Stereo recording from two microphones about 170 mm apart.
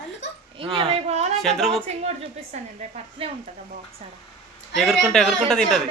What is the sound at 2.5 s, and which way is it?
Speech, 45° right (ahead or behind).